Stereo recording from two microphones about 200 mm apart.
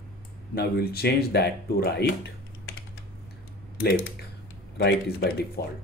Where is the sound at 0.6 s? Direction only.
50° left (ahead or behind).